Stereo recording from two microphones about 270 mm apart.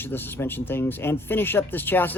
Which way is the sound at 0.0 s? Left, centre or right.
Centre.